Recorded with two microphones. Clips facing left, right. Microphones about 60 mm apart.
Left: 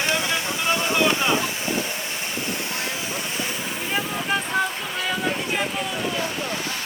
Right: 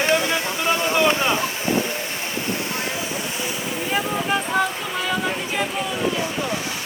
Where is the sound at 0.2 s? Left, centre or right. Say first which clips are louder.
Right 2 dB; right.